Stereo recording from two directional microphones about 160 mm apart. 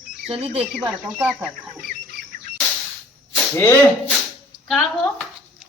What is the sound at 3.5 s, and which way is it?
Speech, 15° left (ahead or behind).